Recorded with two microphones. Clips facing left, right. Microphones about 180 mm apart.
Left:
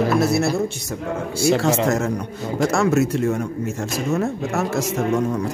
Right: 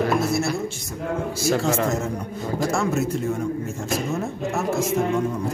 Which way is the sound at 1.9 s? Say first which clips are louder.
Left 4 dB; 80° left.